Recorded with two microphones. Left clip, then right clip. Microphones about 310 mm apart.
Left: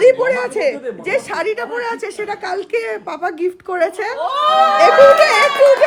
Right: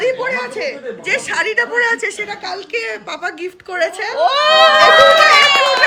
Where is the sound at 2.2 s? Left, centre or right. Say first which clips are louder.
Left 2 dB; centre.